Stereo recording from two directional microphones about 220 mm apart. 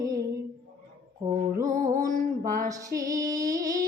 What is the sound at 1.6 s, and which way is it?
Music, 35° right (ahead or behind).